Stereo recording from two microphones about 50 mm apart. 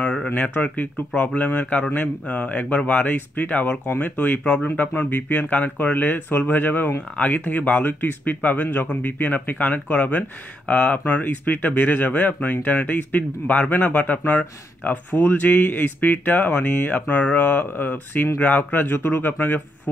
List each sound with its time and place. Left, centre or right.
0.0 s a sound: centre
0.3 s speech: left
15.1 s speech: left